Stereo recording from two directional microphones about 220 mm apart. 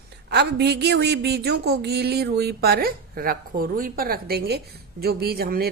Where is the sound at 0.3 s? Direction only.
50° right (ahead or behind).